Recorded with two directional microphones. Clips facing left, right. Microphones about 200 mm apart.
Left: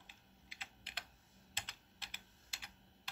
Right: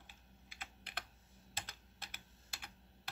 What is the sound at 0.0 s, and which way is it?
Typing, 50° right (ahead or behind).